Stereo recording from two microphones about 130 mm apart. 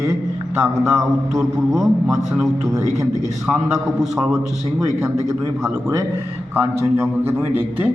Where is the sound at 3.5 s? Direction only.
Centre (ahead or behind).